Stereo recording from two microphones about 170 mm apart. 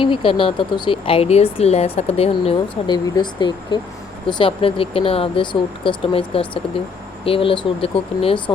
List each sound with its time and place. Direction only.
0.0 s speech: 30° left (ahead or behind)